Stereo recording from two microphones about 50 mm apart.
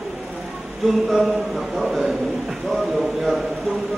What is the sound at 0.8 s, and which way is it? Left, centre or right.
Speech, centre.